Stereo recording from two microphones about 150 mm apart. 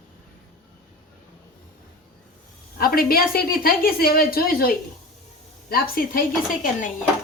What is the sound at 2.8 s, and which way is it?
A woman's voice, 80° left.